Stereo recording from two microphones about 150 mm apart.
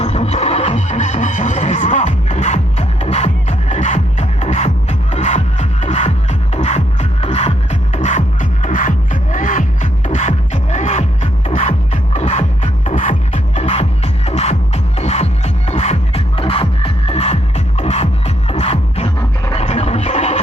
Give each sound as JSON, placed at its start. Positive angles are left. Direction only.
{"t": 0.0, "sound": "music", "side_deg": 45}